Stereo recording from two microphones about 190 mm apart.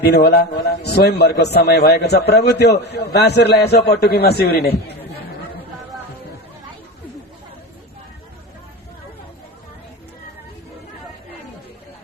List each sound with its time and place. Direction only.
0.0 s a man's voice: 60° left (ahead or behind)